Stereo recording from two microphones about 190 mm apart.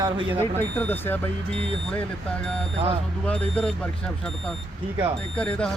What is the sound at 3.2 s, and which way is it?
Speech, 5° left (ahead or behind).